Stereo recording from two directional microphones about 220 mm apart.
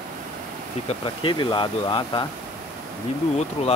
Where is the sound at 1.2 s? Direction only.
20° left (ahead or behind).